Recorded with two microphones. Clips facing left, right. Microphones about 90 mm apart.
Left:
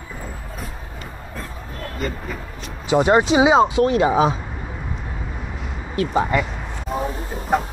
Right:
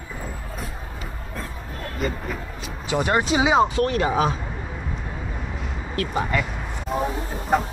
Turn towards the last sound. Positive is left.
turn(degrees=0)  # may be behind; listen again after turning